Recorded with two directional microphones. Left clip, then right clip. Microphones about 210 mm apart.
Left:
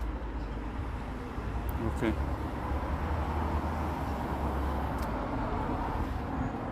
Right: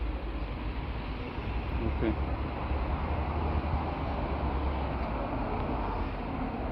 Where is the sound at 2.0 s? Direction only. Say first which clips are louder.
Even; 15° left (ahead or behind).